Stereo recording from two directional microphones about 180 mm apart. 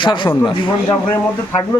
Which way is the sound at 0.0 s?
25° left (ahead or behind).